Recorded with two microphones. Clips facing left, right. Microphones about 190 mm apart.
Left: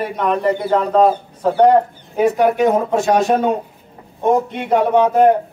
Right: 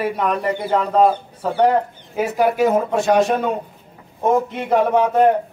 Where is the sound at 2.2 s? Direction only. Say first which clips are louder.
Left 3 dB; 5° right (ahead or behind).